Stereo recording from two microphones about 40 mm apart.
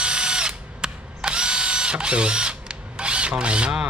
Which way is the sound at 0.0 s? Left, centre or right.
Right.